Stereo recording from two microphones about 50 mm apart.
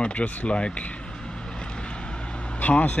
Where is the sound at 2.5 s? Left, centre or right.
Left.